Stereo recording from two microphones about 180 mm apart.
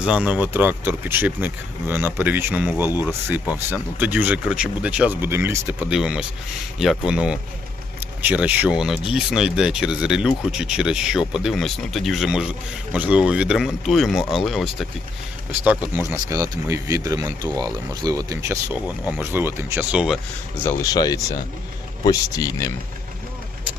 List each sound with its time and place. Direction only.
0.0 s speech: 5° right (ahead or behind)
20.7 s speech: 20° left (ahead or behind)